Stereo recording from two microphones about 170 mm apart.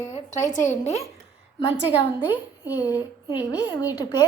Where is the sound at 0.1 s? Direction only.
45° left (ahead or behind).